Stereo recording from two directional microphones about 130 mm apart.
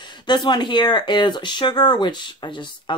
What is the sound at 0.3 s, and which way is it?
Speech, 35° left (ahead or behind).